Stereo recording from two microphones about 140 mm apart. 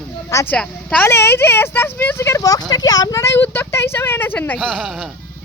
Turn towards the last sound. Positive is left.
turn(degrees=0)  # may be behind; listen again after turning